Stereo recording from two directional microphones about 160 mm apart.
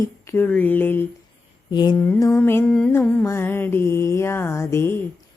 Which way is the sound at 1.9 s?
15° left (ahead or behind).